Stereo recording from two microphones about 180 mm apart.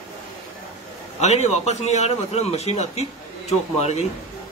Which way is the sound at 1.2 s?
40° left (ahead or behind).